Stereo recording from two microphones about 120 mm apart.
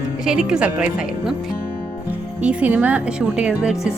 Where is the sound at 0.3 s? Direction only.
5° right (ahead or behind).